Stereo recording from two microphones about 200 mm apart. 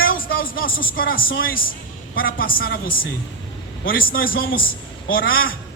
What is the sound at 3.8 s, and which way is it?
Speech, 45° left (ahead or behind).